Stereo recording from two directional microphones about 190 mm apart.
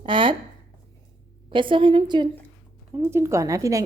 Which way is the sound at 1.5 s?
25° right (ahead or behind).